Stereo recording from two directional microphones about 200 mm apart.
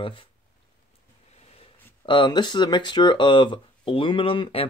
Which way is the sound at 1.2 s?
30° left (ahead or behind).